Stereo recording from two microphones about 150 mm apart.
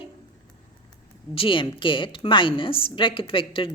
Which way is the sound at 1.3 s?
35° left (ahead or behind).